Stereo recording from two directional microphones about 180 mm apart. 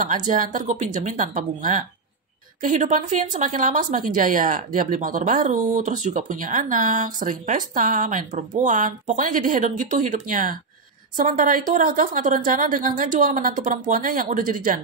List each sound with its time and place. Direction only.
0.0 s a woman's voice: 45° right (ahead or behind)